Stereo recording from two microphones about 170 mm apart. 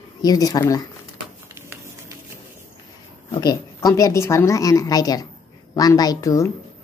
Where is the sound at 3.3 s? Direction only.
20° left (ahead or behind).